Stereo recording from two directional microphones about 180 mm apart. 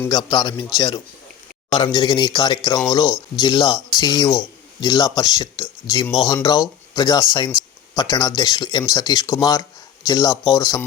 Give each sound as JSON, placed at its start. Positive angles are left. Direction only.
{"t": 0.0, "sound": "speech", "side_deg": 20}